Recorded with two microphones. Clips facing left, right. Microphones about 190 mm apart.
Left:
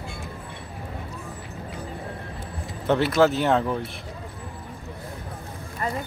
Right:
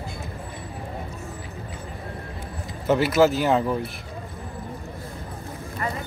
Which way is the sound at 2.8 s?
5° right (ahead or behind).